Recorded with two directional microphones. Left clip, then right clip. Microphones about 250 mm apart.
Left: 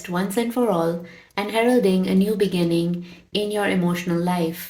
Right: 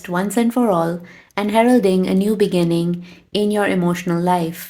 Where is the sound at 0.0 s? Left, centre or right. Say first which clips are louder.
Right 4 dB; right.